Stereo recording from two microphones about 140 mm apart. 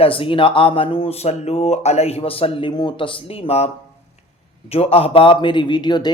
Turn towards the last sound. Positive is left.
turn(degrees=30)  # may be behind; listen again after turning